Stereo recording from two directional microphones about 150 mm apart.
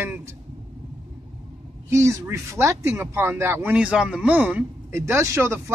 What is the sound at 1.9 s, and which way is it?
Speech, 20° right (ahead or behind).